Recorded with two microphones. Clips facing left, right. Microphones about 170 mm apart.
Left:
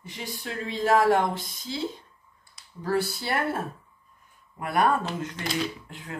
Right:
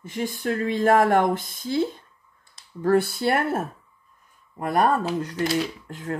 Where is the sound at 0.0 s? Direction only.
50° right (ahead or behind).